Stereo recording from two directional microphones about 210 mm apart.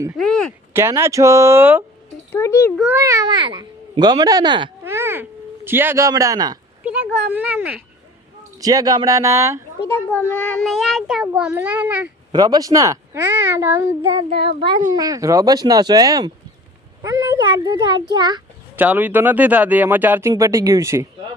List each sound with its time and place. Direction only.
0.2 s speech: 5° left (ahead or behind)
0.7 s speech: 10° right (ahead or behind)
2.3 s a child's voice: 15° left (ahead or behind)
2.7 s speech: 5° right (ahead or behind)
3.0 s speech: 15° right (ahead or behind)
4.8 s a sound: 10° right (ahead or behind)
5.6 s speech: 10° right (ahead or behind)
6.8 s speech: 5° right (ahead or behind)
8.6 s speech: 15° right (ahead or behind)
10.1 s speech: 10° left (ahead or behind)
12.3 s speech: 20° right (ahead or behind)
14.2 s speech: 25° right (ahead or behind)
18.8 s speech: 10° right (ahead or behind)